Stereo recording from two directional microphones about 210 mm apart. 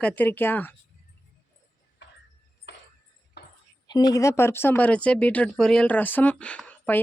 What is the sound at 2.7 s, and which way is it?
Music, 60° left (ahead or behind).